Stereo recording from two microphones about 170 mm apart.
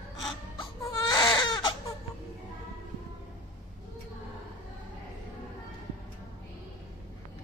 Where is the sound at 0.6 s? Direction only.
25° left (ahead or behind).